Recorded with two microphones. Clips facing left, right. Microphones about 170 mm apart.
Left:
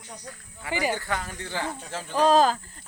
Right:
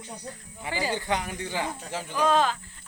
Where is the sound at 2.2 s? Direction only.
35° left (ahead or behind).